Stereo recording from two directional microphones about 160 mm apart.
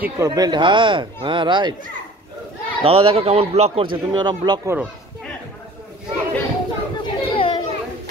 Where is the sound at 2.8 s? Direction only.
35° right (ahead or behind).